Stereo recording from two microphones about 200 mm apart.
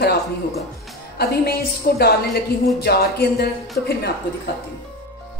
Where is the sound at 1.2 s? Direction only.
50° left (ahead or behind).